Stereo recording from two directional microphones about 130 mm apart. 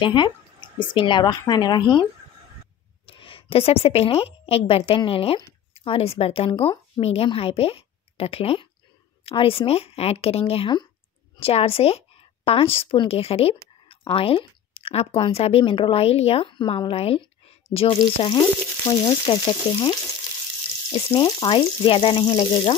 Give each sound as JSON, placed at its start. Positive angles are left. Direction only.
{"t": 0.0, "sound": "a woman's voice", "side_deg": 35}
{"t": 1.5, "sound": "frying", "side_deg": 35}
{"t": 3.1, "sound": "a woman's voice", "side_deg": 45}
{"t": 18.9, "sound": "frying", "side_deg": 25}
{"t": 20.9, "sound": "frying", "side_deg": 35}
{"t": 22.3, "sound": "speech", "side_deg": 45}